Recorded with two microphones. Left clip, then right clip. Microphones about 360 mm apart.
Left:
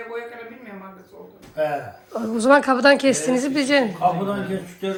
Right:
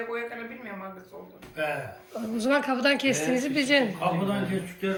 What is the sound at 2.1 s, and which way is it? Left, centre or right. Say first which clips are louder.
A woman's voice: left 10 dB; centre.